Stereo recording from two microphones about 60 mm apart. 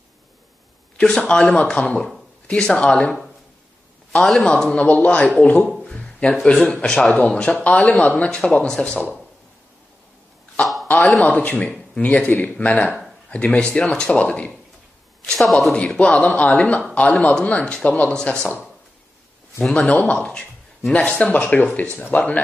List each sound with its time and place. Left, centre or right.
0.9 s a man's voice: centre
4.1 s a man's voice: centre
4.7 s speech: left
5.9 s a sound: centre
6.4 s a man's voice: centre
10.6 s a sound: centre
10.9 s a man's voice: left
15.2 s a man's voice: centre
16.0 s speech: left
19.7 s speech: centre